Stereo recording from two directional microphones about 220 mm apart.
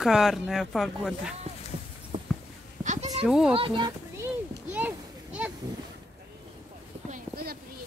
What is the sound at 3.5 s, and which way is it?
Speech, 25° right (ahead or behind).